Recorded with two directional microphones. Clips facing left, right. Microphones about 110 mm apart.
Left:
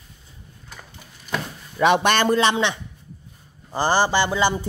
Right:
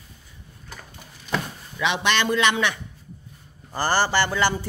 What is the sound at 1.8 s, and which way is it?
A man's voice, 45° left (ahead or behind).